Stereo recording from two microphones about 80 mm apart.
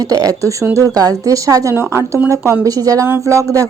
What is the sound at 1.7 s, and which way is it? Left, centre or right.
Speech, right.